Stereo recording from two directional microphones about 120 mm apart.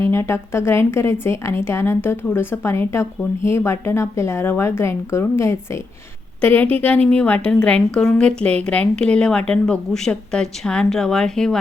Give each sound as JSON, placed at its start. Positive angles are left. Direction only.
{"t": 0.1, "sound": "a woman's voice", "side_deg": 20}